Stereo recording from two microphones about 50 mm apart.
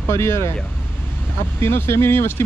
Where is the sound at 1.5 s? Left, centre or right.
Left.